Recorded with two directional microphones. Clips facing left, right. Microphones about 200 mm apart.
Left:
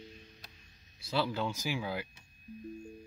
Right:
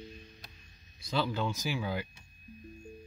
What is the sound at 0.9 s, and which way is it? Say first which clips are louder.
Speech: right 1 dB; 5° left (ahead or behind).